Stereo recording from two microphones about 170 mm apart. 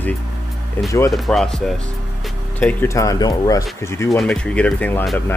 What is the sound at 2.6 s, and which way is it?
Speech, 15° left (ahead or behind).